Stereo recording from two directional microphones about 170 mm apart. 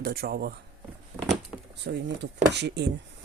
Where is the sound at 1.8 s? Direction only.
90° right.